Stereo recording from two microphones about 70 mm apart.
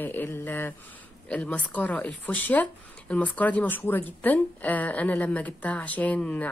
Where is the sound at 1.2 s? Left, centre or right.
Centre.